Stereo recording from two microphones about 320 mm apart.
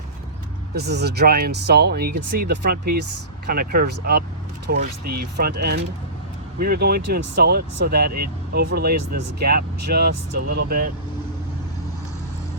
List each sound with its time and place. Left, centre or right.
0.7 s speech: right